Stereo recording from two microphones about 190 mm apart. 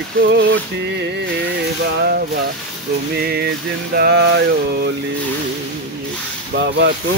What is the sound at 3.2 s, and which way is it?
Speech, 55° right (ahead or behind).